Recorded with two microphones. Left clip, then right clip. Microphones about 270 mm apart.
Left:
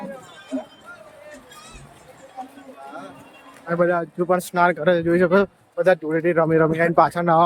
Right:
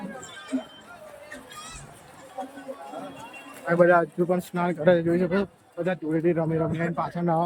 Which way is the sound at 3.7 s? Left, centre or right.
Centre.